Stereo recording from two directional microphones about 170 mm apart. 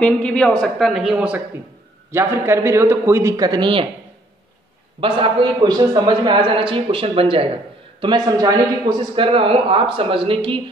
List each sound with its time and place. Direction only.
0.0 s a man's voice: 5° left (ahead or behind); by 3.8 s 25° right (ahead or behind)
5.0 s a man's voice: 30° right (ahead or behind)